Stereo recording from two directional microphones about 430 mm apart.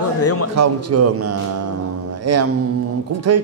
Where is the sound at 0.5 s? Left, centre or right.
Right.